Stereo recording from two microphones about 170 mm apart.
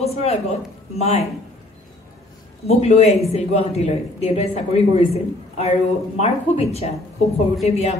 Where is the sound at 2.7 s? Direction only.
40° left (ahead or behind).